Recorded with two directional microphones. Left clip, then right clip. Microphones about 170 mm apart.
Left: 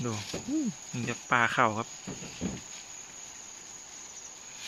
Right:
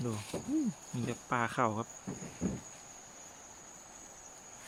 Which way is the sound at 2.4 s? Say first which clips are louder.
Left 1 dB; 20° right (ahead or behind).